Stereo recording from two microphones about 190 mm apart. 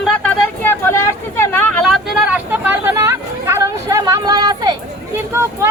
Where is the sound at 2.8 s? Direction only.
15° right (ahead or behind).